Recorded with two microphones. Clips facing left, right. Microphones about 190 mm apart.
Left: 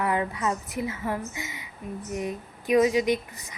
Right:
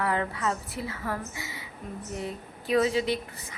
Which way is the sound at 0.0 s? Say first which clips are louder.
Left 2 dB; 15° left (ahead or behind).